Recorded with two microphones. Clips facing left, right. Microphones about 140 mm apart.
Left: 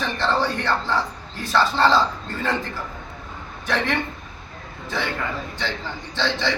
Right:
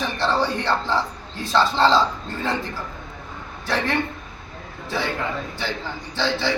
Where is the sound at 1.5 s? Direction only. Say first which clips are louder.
Right 1 dB; 15° right (ahead or behind).